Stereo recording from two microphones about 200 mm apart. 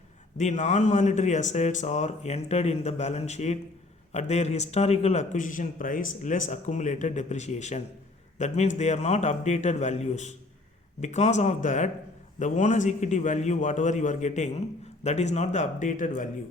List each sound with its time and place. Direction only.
0.3 s a man's voice: 35° left (ahead or behind)